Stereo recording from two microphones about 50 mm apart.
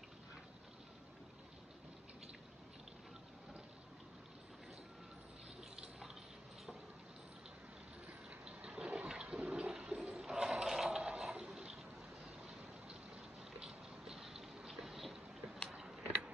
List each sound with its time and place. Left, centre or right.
5.8 s water: centre
8.5 s toilet flush: centre
9.4 s a sound: right
13.6 s boat: centre